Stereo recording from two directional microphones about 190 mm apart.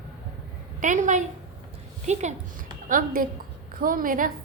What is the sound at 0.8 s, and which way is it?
A woman's voice, 40° right (ahead or behind).